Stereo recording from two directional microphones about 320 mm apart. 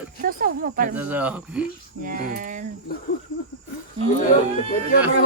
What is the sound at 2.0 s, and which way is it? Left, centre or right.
Speech, right.